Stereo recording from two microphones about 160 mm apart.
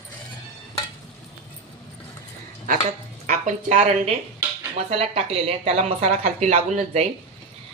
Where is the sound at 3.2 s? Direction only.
50° right (ahead or behind).